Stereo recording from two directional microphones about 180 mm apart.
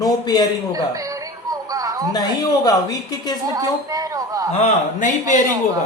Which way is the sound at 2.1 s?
20° left (ahead or behind).